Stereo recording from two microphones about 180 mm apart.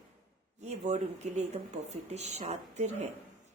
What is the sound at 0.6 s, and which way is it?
Speech, 40° right (ahead or behind).